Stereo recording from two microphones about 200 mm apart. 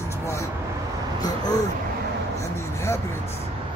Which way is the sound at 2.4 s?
15° left (ahead or behind).